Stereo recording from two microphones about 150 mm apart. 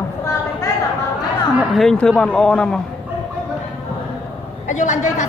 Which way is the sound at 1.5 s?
Centre (ahead or behind).